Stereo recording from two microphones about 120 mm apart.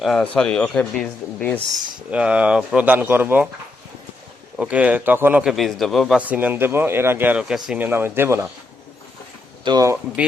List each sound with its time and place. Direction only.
0.0 s speech: 5° left (ahead or behind)
2.0 s speech: 10° right (ahead or behind)
4.5 s speech: 10° right (ahead or behind)
6.1 s speech: 15° right (ahead or behind)
9.7 s speech: 40° right (ahead or behind)